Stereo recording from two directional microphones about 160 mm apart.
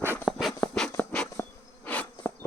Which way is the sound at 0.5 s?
15° left (ahead or behind).